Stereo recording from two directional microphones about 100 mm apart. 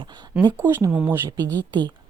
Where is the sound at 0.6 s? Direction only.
25° right (ahead or behind).